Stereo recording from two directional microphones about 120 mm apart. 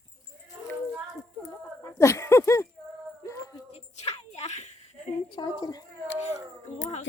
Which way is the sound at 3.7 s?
65° left (ahead or behind).